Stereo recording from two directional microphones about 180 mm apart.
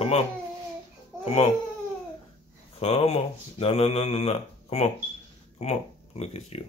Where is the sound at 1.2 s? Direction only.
35° left (ahead or behind).